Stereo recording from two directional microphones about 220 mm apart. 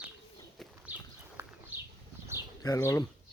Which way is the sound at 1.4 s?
10° right (ahead or behind).